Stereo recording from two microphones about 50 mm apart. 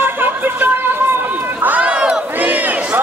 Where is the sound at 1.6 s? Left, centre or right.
Right.